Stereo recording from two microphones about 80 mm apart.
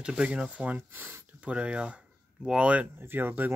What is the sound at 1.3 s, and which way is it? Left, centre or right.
Speech, centre.